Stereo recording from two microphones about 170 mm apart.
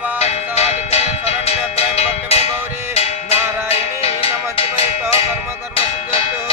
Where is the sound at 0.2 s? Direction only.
40° left (ahead or behind).